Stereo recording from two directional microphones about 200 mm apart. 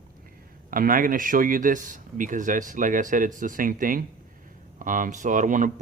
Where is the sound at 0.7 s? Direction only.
45° right (ahead or behind).